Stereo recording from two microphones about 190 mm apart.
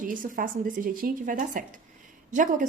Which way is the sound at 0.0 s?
45° right (ahead or behind).